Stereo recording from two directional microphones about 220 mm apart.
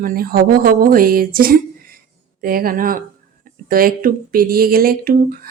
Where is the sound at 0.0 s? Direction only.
40° right (ahead or behind).